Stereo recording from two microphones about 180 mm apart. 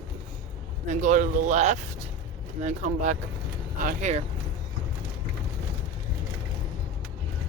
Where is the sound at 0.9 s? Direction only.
45° right (ahead or behind).